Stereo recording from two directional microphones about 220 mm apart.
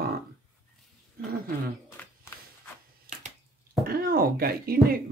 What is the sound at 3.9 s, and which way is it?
Speech, 40° right (ahead or behind).